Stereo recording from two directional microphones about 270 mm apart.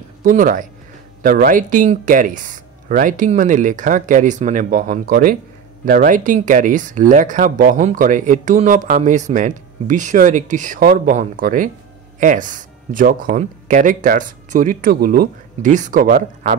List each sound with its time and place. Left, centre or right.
0.2 s speech: right